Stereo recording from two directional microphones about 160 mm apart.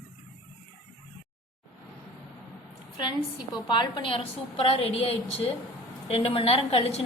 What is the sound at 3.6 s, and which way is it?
A woman's voice, 30° left (ahead or behind).